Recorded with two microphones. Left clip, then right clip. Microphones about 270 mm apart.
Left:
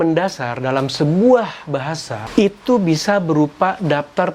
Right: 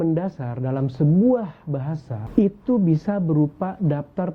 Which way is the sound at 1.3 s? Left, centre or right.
Centre.